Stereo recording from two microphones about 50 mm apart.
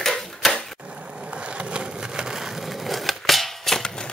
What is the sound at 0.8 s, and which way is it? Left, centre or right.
Skateboard, right.